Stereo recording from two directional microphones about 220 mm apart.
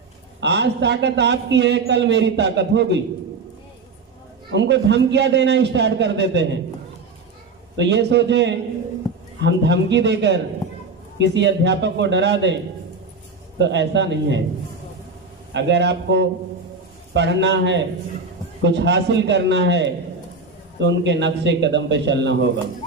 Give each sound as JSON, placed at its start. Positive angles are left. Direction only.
{"t": 0.3, "sound": "a man's voice", "side_deg": -50}
{"t": 4.5, "sound": "a man's voice", "side_deg": -55}
{"t": 7.8, "sound": "a man's voice", "side_deg": -50}
{"t": 13.6, "sound": "a man's voice", "side_deg": -55}
{"t": 15.5, "sound": "a man's voice", "side_deg": -55}